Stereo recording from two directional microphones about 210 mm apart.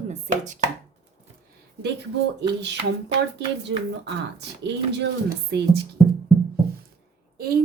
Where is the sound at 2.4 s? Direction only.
55° right (ahead or behind).